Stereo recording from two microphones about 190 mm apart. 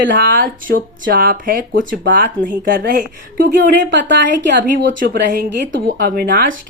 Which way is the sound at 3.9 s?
70° right (ahead or behind).